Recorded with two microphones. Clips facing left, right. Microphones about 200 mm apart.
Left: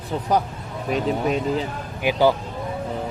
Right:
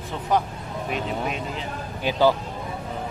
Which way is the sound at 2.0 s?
15° left (ahead or behind).